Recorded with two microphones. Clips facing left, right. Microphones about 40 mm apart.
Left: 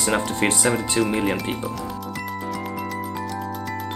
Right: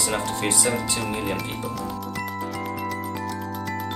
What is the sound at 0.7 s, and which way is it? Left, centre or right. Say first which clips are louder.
Speech: left 4 dB; left.